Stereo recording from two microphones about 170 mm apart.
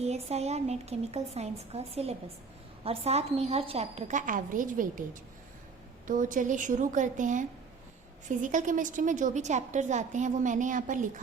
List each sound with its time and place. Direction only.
0.0 s a woman's voice: 40° right (ahead or behind)
6.1 s a woman's voice: 50° right (ahead or behind)